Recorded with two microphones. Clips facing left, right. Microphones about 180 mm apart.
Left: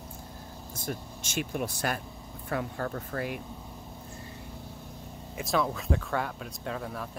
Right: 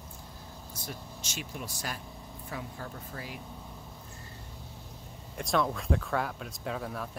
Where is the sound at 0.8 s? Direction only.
50° left (ahead or behind).